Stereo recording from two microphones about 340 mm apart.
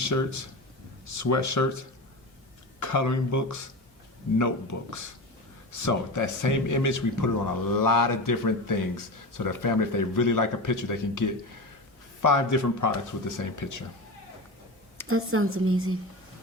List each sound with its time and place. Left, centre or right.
0.0 s a man's voice: left
2.8 s a man's voice: left
15.0 s speech: right